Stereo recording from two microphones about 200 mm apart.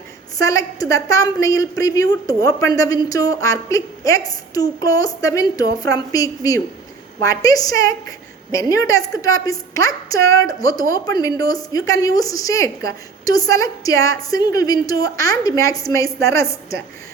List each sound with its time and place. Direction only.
0.3 s a woman's voice: 15° left (ahead or behind)